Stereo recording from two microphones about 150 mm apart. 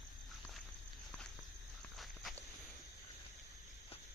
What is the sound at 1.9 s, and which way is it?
Walk, centre (ahead or behind).